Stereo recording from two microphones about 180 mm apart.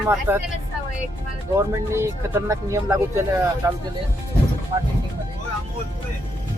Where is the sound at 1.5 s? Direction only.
15° right (ahead or behind).